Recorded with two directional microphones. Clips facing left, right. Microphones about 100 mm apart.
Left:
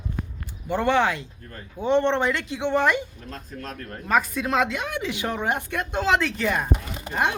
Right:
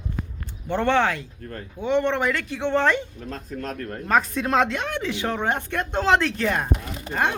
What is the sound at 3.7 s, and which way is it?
Speech, 45° right (ahead or behind).